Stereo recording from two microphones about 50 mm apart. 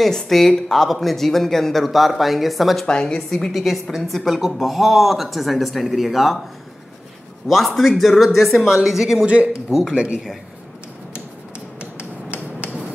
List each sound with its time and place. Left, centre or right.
0.0 s speech: centre
2.9 s a woman's voice: centre
3.5 s speech: centre
7.4 s speech: centre
9.2 s speech: right
9.7 s speech: centre
9.9 s speech: right
11.8 s a sound: right